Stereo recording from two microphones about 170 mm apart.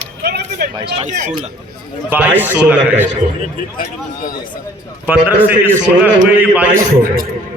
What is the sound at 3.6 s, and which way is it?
Speech, 55° left (ahead or behind).